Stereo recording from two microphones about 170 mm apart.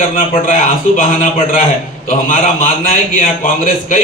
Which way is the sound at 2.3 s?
50° left (ahead or behind).